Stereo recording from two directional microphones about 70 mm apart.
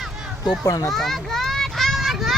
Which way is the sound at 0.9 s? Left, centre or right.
Centre.